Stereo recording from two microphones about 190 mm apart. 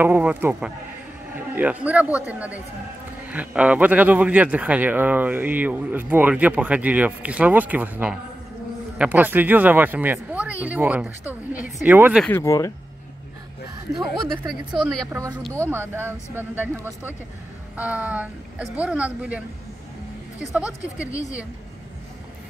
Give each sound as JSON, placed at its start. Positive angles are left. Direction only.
{"t": 0.0, "sound": "speech", "side_deg": -10}
{"t": 12.3, "sound": "speech", "side_deg": 15}
{"t": 14.5, "sound": "speech", "side_deg": 0}
{"t": 15.6, "sound": "speech", "side_deg": -10}